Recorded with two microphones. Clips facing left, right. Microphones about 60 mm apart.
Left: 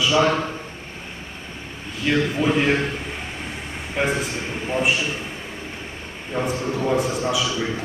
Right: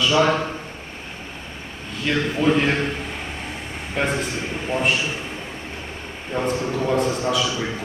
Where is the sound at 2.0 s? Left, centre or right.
Centre.